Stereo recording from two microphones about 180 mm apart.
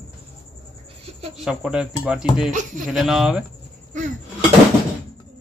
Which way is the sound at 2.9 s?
Centre (ahead or behind).